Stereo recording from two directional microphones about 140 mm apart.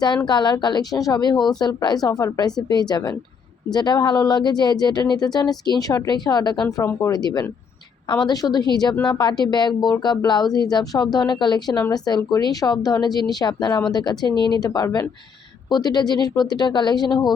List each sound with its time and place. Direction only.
0.3 s speech: 30° left (ahead or behind)